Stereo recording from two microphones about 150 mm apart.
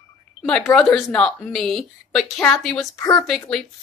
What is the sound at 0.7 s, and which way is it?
Speech, 5° left (ahead or behind).